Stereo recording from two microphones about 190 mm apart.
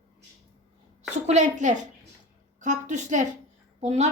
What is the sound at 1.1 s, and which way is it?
Speech, 35° right (ahead or behind).